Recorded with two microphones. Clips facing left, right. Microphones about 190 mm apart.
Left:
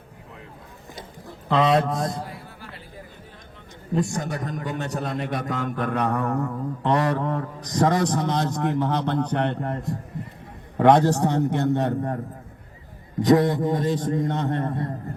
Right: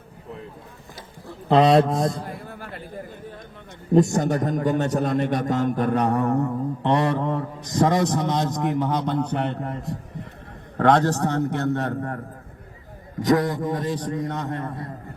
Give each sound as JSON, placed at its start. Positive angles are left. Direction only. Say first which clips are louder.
{"t": 1.5, "sound": "speech", "louder": "right 4 dB", "side_deg": -35}
{"t": 2.2, "sound": "music", "louder": "right 4 dB", "side_deg": -50}
{"t": 3.9, "sound": "a man's voice", "louder": "right 7 dB", "side_deg": -45}
{"t": 10.8, "sound": "a man's voice", "louder": "left 2 dB", "side_deg": 10}
{"t": 13.2, "sound": "a man's voice", "louder": "left 2 dB", "side_deg": 25}